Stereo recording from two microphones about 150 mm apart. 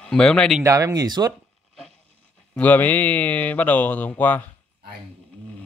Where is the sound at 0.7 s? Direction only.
20° right (ahead or behind).